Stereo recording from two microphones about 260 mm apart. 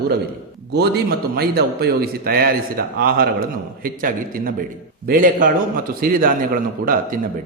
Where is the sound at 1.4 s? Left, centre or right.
Right.